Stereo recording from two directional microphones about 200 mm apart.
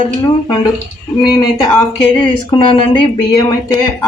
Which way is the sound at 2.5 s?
25° left (ahead or behind).